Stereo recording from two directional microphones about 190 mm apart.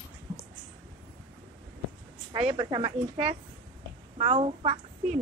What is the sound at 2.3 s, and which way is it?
A woman's voice, 25° right (ahead or behind).